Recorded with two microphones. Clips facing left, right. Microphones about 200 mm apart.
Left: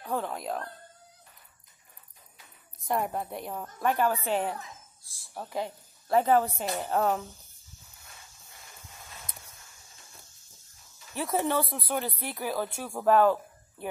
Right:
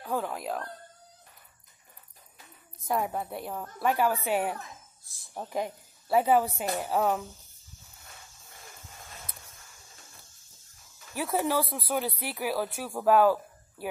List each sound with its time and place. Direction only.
0.0 s music: 5° right (ahead or behind)
2.8 s a woman's voice: centre (ahead or behind)
11.1 s a woman's voice: 5° right (ahead or behind)